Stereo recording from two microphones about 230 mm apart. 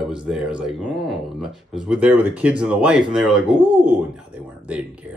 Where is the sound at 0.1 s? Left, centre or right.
Centre.